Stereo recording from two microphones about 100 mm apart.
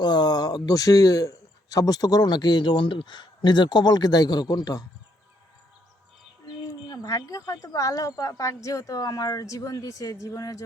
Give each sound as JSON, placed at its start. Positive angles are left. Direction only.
{"t": 0.0, "sound": "a man's voice", "side_deg": 45}
{"t": 6.8, "sound": "speech", "side_deg": 35}